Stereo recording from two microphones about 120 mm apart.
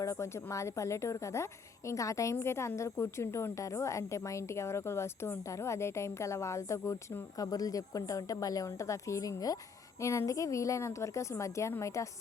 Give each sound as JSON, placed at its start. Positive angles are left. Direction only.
{"t": 0.0, "sound": "a woman's voice", "side_deg": 25}